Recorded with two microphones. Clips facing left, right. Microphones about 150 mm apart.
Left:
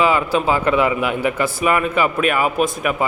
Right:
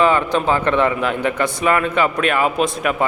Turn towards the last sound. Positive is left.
turn(degrees=5)  # may be behind; listen again after turning